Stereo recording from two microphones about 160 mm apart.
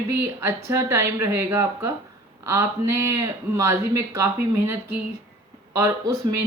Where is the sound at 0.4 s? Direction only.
15° right (ahead or behind).